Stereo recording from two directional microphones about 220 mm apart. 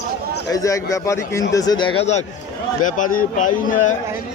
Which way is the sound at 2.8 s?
35° left (ahead or behind).